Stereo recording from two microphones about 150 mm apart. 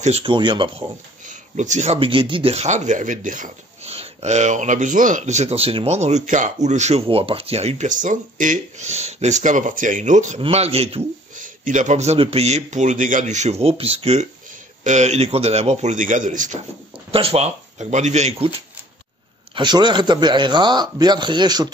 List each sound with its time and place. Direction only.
0.0 s speech: 40° right (ahead or behind)
1.2 s speech: 55° right (ahead or behind)
3.8 s speech: 45° right (ahead or behind)
10.4 s speech: 45° right (ahead or behind)
11.3 s speech: 60° right (ahead or behind)
17.1 s speech: 40° right (ahead or behind)
19.5 s a man's voice: 30° right (ahead or behind)